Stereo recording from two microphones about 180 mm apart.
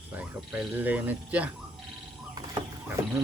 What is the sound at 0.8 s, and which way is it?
Speech, 10° right (ahead or behind).